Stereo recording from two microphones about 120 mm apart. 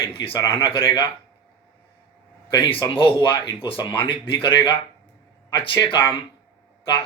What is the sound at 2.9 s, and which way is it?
Speech, 45° left (ahead or behind).